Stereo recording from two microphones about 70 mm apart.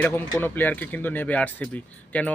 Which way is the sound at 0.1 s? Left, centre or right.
Left.